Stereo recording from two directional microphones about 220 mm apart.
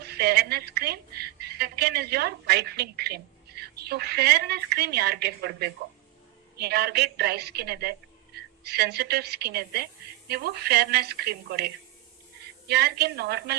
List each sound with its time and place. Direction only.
0.0 s a woman's voice: 45° right (ahead or behind)